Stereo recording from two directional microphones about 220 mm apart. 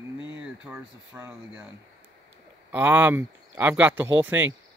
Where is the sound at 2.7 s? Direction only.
10° right (ahead or behind).